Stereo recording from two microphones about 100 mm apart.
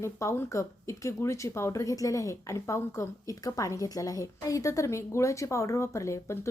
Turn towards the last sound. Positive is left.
turn(degrees=30)  # may be behind; listen again after turning